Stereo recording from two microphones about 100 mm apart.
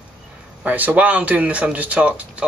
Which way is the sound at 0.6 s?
15° right (ahead or behind).